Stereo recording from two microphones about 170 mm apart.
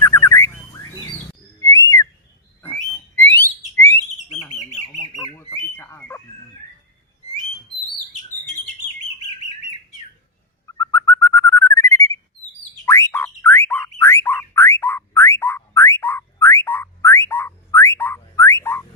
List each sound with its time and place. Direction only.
0.0 s bird: 15° left (ahead or behind)
1.6 s whistling: 20° left (ahead or behind)
3.2 s a sound: 15° left (ahead or behind)
5.1 s bird: 25° left (ahead or behind)
5.7 s chicken: 15° left (ahead or behind)
10.7 s bird: 15° left (ahead or behind)
12.8 s a sound: 20° left (ahead or behind)